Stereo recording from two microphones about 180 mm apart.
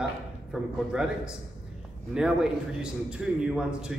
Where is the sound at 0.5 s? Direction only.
5° right (ahead or behind).